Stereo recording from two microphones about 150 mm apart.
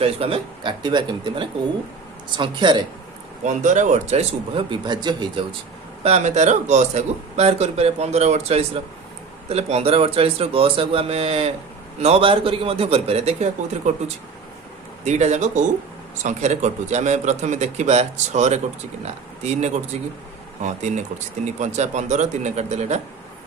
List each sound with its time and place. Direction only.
0.0 s a man's voice: 40° right (ahead or behind)
3.4 s speech: 55° right (ahead or behind)
4.7 s a man's voice: 30° right (ahead or behind)
6.0 s a man's voice: 45° right (ahead or behind)
15.0 s speech: 50° right (ahead or behind)